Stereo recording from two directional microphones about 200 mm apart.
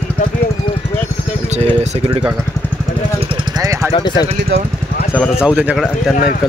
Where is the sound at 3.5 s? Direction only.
15° right (ahead or behind).